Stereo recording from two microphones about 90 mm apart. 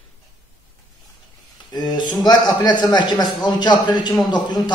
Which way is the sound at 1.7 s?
50° left (ahead or behind).